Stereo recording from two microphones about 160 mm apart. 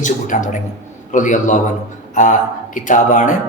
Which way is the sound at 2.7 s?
55° left (ahead or behind).